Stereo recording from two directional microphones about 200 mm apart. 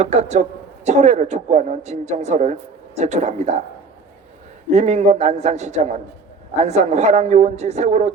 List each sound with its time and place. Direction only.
0.0 s speech: 35° right (ahead or behind)
4.7 s speech: 35° right (ahead or behind)